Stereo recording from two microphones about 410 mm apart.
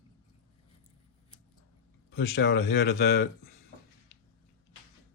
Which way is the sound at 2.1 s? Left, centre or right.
Left.